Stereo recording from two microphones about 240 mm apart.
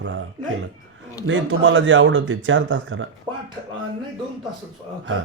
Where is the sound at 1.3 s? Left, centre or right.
Right.